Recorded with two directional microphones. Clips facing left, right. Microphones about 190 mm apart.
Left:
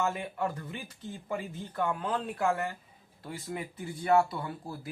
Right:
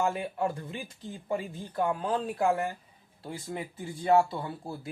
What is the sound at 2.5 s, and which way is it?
Speech, 15° right (ahead or behind).